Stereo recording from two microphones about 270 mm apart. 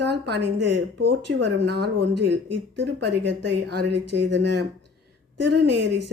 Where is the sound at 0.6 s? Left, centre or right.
Right.